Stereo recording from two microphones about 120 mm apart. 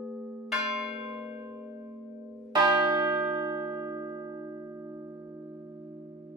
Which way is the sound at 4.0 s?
25° right (ahead or behind).